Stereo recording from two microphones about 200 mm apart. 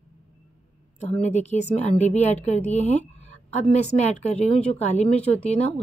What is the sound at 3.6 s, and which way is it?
Speech, 35° left (ahead or behind).